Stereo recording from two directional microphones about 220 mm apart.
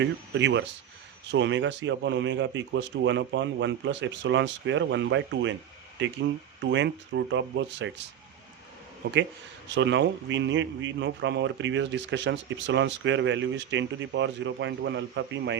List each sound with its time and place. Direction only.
0.0 s a man's voice: 55° right (ahead or behind)
9.6 s a man's voice: 55° right (ahead or behind)